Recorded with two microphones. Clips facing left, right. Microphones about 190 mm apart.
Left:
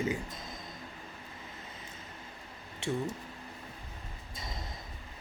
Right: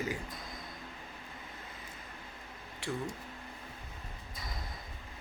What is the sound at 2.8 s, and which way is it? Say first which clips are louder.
Speech: left 4 dB; 25° left (ahead or behind).